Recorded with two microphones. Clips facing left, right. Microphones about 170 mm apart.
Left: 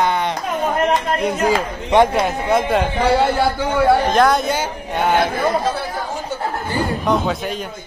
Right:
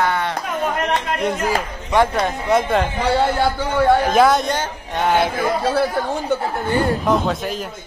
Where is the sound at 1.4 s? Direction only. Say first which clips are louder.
Left 4 dB; 20° left (ahead or behind).